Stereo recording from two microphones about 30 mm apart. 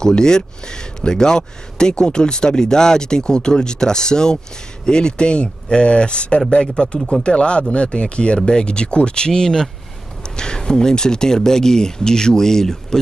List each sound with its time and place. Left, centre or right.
0.1 s speech: left